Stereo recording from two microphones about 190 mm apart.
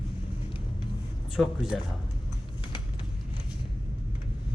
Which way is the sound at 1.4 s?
Centre (ahead or behind).